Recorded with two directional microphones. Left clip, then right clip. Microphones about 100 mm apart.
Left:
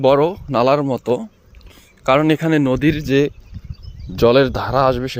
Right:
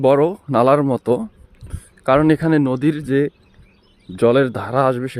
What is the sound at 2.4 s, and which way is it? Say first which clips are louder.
Speech: even; 35° right (ahead or behind).